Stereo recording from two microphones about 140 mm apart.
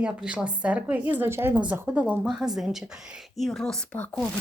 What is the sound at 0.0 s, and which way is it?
A woman's voice, 5° right (ahead or behind).